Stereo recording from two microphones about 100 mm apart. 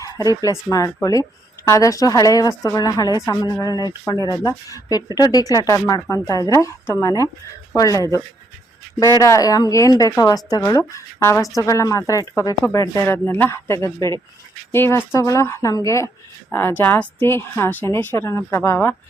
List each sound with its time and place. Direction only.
0.0 s speech: 35° left (ahead or behind)
9.2 s a woman's voice: 35° left (ahead or behind)
13.1 s a woman's voice: 20° left (ahead or behind)
16.5 s a woman's voice: 20° left (ahead or behind)